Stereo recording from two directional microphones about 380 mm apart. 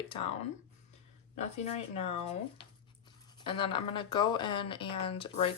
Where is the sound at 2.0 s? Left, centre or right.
Centre.